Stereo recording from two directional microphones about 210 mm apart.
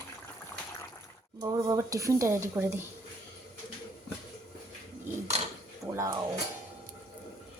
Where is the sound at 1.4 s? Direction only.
15° right (ahead or behind).